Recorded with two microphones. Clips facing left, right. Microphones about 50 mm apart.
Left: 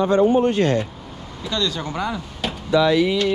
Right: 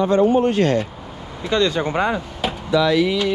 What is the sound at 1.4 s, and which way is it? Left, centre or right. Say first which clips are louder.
Speech: right 6 dB; right.